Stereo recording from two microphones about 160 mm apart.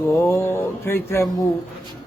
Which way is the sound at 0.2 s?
15° left (ahead or behind).